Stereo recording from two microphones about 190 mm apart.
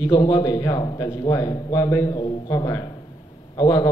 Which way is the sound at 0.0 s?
20° left (ahead or behind).